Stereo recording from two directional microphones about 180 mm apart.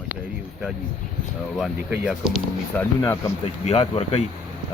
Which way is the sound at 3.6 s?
35° left (ahead or behind).